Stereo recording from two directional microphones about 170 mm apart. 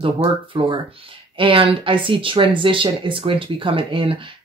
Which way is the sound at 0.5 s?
30° right (ahead or behind).